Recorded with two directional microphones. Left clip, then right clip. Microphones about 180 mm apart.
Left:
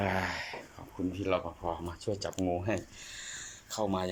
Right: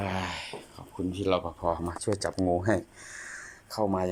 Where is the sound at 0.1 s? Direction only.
15° right (ahead or behind).